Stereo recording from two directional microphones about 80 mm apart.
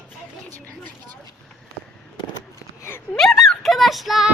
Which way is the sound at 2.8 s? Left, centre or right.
Left.